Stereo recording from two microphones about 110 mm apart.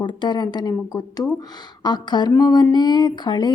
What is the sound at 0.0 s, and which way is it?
Speech, 45° left (ahead or behind).